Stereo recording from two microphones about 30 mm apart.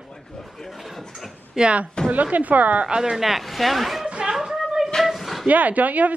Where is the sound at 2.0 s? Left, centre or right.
Left.